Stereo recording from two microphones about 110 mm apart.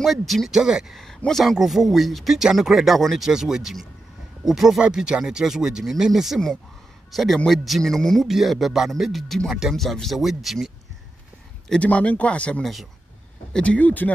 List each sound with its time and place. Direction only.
0.0 s speech: centre (ahead or behind)
11.7 s speech: 10° left (ahead or behind)